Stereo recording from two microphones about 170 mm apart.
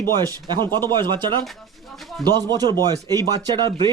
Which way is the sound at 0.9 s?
25° right (ahead or behind).